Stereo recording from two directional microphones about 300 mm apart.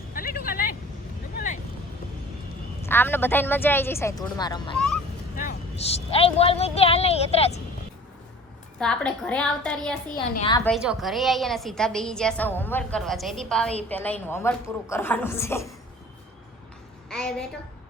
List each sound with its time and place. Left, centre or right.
0.1 s vehicle: left
2.8 s a woman's voice: centre
8.8 s a woman's voice: centre
10.3 s speech: centre
10.6 s a woman's voice: centre
17.1 s a sound: centre